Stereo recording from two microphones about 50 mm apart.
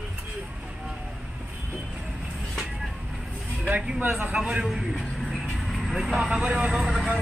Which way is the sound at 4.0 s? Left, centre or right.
Right.